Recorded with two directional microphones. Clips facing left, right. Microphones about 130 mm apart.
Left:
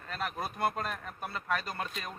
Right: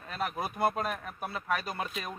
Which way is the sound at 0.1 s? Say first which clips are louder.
Right 2 dB; 10° right (ahead or behind).